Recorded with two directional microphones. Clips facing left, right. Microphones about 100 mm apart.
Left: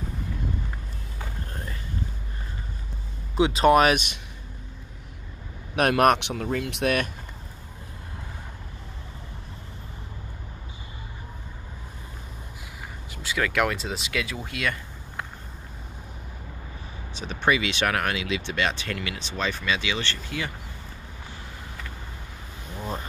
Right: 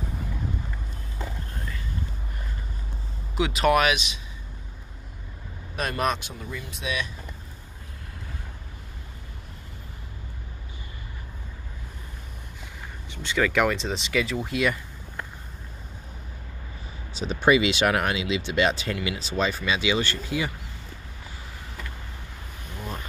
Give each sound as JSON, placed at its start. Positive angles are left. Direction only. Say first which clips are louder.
{"t": 3.3, "sound": "speech", "louder": "left 3 dB", "side_deg": 30}
{"t": 3.9, "sound": "speech", "louder": "left 3 dB", "side_deg": 55}
{"t": 5.8, "sound": "speech", "louder": "left 7 dB", "side_deg": 65}
{"t": 13.1, "sound": "speech", "louder": "right 3 dB", "side_deg": 5}
{"t": 17.4, "sound": "speech", "louder": "right 4 dB", "side_deg": -10}